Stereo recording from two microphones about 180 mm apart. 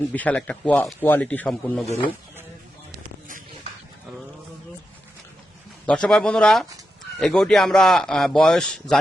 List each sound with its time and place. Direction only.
0.1 s speech: 10° left (ahead or behind)
3.2 s a sound: 45° right (ahead or behind)
5.8 s a man's voice: 5° left (ahead or behind)